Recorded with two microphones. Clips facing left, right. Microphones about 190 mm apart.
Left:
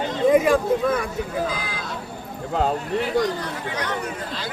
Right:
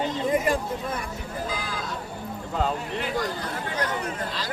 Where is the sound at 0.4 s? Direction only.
90° left.